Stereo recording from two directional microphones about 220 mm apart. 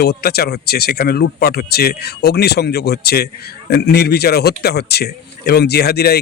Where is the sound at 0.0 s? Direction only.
45° left (ahead or behind).